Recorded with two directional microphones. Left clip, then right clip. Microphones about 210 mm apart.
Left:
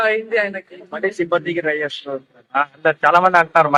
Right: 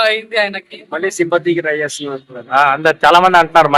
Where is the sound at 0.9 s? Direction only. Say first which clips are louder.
Right 4 dB; 55° right (ahead or behind).